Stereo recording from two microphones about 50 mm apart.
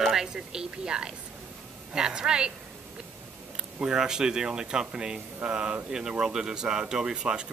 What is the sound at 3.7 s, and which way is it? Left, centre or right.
Speech, centre.